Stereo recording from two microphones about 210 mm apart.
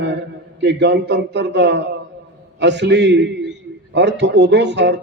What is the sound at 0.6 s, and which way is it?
A man's voice, 55° right (ahead or behind).